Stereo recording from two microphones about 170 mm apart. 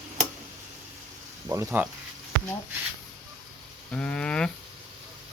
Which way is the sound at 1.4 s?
15° right (ahead or behind).